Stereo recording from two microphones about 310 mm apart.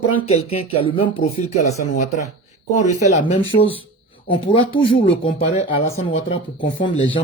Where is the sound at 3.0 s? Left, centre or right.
Left.